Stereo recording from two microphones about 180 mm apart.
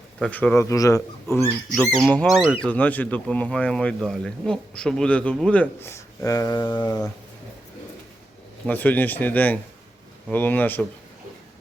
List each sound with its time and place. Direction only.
0.2 s speech: 10° left (ahead or behind)
1.7 s speech: 5° left (ahead or behind)
8.6 s speech: 10° left (ahead or behind)